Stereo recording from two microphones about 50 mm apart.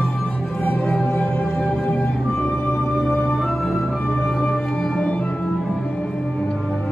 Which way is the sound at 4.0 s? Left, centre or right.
Left.